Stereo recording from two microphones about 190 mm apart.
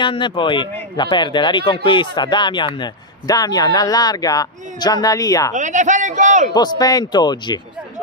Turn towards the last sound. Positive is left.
turn(degrees=20)  # may be behind; listen again after turning